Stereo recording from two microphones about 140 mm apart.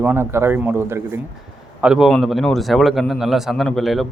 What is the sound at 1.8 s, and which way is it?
A man's voice, 5° right (ahead or behind).